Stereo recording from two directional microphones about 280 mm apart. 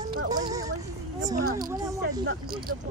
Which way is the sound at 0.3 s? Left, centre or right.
Centre.